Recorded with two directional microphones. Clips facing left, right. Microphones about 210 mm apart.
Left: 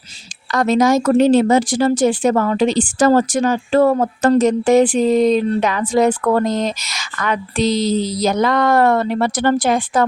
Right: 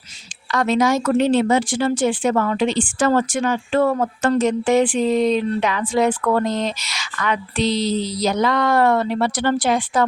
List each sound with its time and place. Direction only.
0.5 s speech: 40° left (ahead or behind)